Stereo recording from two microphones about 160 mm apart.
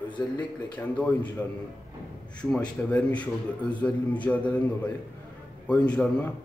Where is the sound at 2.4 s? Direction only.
5° left (ahead or behind).